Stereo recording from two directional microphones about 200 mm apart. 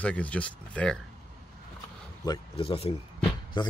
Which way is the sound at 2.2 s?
25° left (ahead or behind).